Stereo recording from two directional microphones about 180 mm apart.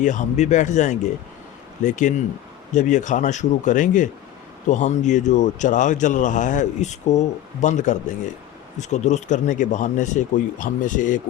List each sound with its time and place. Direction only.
0.0 s speech: 45° left (ahead or behind)